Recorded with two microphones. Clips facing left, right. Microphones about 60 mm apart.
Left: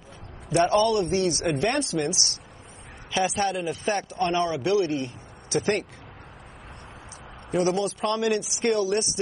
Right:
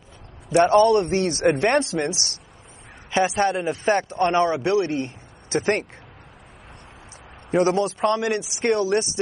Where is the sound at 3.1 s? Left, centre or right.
Right.